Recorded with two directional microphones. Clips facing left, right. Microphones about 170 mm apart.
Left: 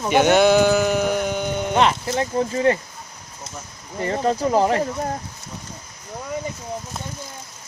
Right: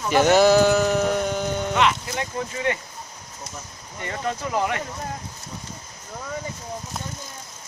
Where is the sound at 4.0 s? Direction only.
35° left (ahead or behind).